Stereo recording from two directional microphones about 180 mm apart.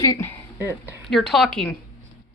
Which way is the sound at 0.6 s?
15° right (ahead or behind).